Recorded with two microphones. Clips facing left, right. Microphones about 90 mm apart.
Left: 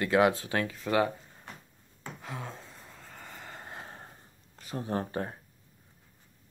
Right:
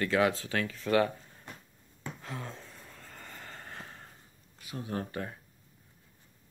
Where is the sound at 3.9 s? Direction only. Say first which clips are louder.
Left 3 dB; 30° left (ahead or behind).